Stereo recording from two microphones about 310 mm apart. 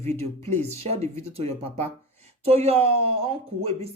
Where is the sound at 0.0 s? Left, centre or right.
Centre.